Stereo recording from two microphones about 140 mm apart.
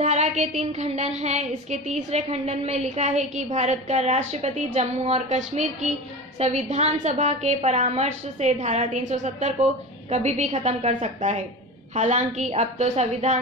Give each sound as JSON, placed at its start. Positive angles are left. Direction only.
{"t": 0.0, "sound": "a woman's voice", "side_deg": -55}